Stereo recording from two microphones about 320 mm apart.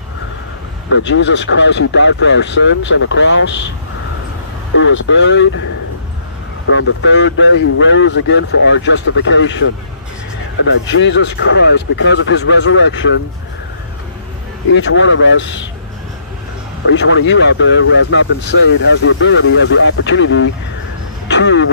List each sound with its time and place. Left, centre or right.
0.8 s speech: left
4.7 s speech: left
6.7 s speech: left
14.7 s speech: left
16.9 s speech: left